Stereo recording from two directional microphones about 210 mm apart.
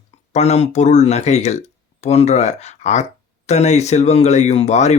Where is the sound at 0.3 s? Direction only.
30° left (ahead or behind).